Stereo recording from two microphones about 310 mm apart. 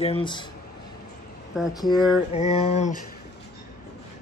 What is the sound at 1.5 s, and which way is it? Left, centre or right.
Speech, centre.